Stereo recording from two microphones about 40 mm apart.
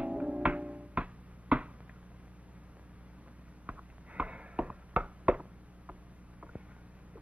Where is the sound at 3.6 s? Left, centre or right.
Right.